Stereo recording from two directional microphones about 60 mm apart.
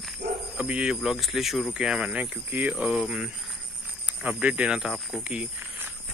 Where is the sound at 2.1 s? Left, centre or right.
Right.